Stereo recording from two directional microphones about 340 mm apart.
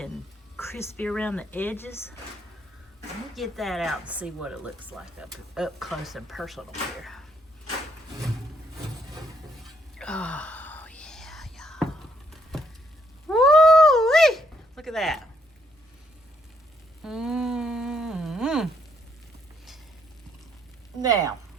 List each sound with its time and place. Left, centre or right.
0.5 s speech: centre
3.3 s speech: centre
10.0 s music: centre
13.2 s a sound: centre
17.0 s a sound: centre
21.0 s speech: centre